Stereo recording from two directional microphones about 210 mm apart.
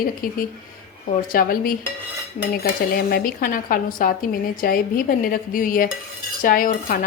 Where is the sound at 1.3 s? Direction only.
45° left (ahead or behind).